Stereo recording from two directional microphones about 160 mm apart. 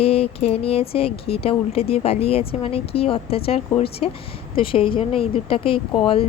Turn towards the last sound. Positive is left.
turn(degrees=35)  # may be behind; listen again after turning